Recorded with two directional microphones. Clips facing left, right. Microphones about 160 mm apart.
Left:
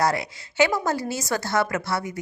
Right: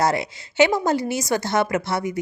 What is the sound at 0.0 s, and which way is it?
A woman's voice, 25° right (ahead or behind).